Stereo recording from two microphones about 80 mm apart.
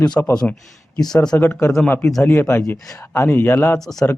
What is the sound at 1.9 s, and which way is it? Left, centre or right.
Speech, centre.